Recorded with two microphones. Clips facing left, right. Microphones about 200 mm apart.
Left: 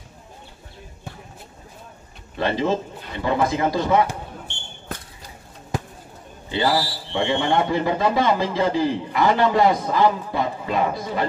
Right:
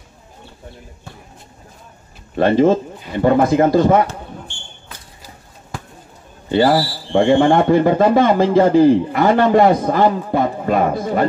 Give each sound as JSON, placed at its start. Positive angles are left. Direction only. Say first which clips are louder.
{"t": 2.3, "sound": "speech", "louder": "right 9 dB", "side_deg": -50}
{"t": 6.5, "sound": "speech", "louder": "right 7 dB", "side_deg": -50}